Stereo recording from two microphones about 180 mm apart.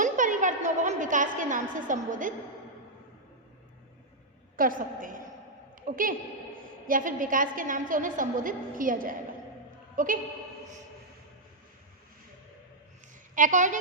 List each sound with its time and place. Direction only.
0.0 s a sound: 45° right (ahead or behind)
4.5 s a woman's voice: 50° right (ahead or behind)
13.3 s a woman's voice: 45° right (ahead or behind)